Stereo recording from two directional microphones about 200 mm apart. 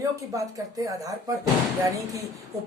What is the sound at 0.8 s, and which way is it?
Speech, 15° right (ahead or behind).